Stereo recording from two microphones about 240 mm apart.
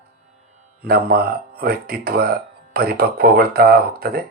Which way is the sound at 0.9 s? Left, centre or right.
Right.